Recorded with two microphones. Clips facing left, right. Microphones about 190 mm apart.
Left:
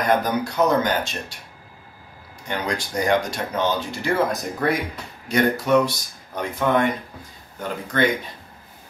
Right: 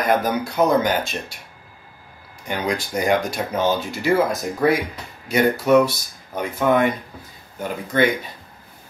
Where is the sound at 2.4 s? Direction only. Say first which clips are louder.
Right 2 dB; 10° right (ahead or behind).